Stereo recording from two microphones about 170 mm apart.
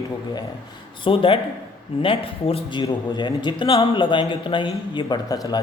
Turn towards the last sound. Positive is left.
turn(degrees=25)  # may be behind; listen again after turning